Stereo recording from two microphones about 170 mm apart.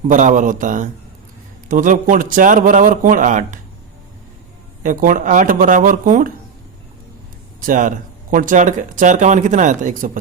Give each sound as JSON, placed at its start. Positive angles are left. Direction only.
{"t": 0.1, "sound": "speech", "side_deg": -50}
{"t": 4.8, "sound": "speech", "side_deg": -50}
{"t": 7.6, "sound": "speech", "side_deg": -50}